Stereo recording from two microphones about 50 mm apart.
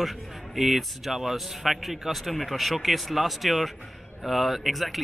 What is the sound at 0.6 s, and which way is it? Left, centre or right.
Speech, centre.